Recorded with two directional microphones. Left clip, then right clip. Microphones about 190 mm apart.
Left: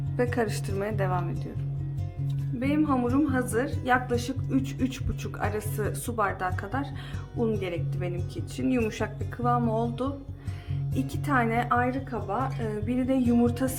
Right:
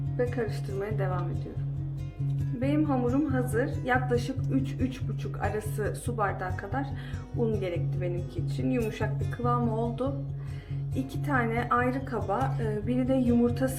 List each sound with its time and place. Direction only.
0.2 s speech: 50° left (ahead or behind)
2.6 s a woman's voice: 20° left (ahead or behind)
11.9 s a woman's voice: centre (ahead or behind); by 13.7 s 20° left (ahead or behind)